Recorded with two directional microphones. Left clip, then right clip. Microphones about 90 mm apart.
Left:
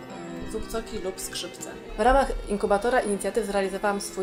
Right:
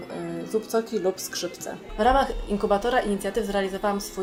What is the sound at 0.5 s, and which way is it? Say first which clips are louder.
Speech: right 8 dB; 60° left (ahead or behind).